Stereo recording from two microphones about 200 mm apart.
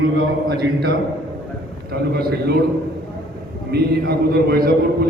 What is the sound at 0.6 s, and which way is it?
A man's voice, 50° right (ahead or behind).